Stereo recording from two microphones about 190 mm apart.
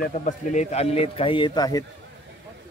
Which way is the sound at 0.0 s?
40° left (ahead or behind).